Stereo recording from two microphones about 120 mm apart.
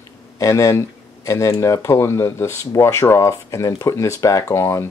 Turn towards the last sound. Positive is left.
turn(degrees=25)  # may be behind; listen again after turning